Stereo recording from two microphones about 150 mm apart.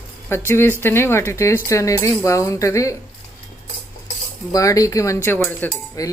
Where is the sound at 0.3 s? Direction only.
15° left (ahead or behind).